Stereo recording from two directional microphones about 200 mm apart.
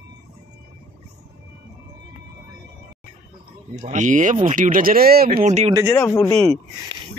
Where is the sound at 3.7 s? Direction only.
40° right (ahead or behind).